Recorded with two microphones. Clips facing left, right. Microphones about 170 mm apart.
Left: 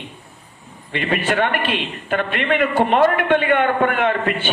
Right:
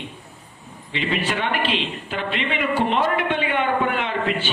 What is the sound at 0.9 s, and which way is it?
A man's voice, 55° left (ahead or behind).